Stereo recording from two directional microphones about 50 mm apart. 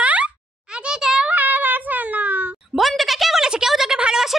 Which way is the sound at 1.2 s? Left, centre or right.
Right.